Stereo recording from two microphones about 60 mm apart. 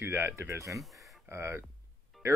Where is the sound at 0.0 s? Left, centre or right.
Right.